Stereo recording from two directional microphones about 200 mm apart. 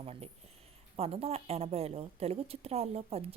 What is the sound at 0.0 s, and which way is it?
Speech, 30° right (ahead or behind).